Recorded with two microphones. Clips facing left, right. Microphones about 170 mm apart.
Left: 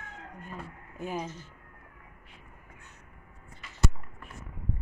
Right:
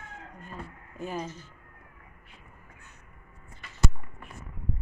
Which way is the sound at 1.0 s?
15° left (ahead or behind).